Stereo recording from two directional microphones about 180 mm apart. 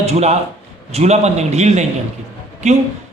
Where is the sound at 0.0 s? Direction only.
35° right (ahead or behind).